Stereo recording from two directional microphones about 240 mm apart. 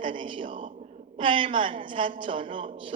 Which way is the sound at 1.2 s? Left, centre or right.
Right.